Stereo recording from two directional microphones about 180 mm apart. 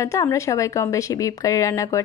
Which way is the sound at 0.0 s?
15° left (ahead or behind).